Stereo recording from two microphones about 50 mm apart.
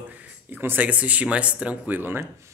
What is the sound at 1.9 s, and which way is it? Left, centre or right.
Speech, right.